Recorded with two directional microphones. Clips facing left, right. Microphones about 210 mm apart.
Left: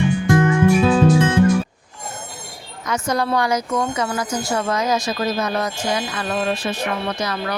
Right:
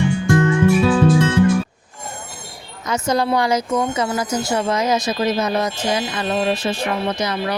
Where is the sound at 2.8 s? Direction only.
25° right (ahead or behind).